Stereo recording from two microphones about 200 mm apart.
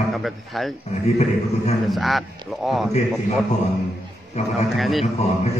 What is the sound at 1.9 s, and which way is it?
Speech, centre (ahead or behind).